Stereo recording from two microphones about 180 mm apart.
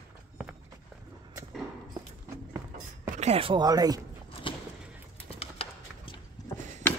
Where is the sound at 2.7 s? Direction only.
45° right (ahead or behind); by 4.0 s 20° right (ahead or behind).